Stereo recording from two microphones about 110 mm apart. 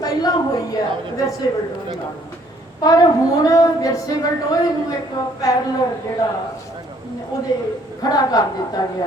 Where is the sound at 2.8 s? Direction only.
35° left (ahead or behind).